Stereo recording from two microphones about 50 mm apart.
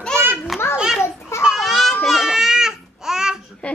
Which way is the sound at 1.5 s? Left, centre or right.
Centre.